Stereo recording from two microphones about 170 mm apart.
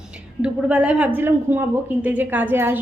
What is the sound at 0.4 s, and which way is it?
A woman's voice, 5° right (ahead or behind).